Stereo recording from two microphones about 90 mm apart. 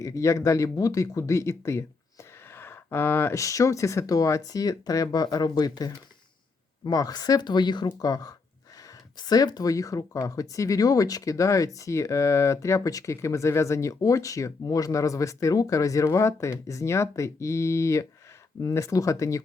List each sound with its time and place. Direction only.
0.0 s a woman's voice: 35° left (ahead or behind); by 7.9 s 55° left (ahead or behind)
8.0 s a woman's voice: 45° left (ahead or behind)